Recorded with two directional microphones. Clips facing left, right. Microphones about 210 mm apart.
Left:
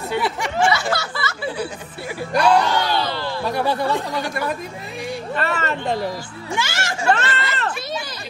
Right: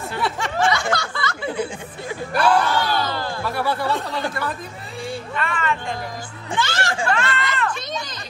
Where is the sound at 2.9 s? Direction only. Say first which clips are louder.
Left 1 dB; 45° right (ahead or behind).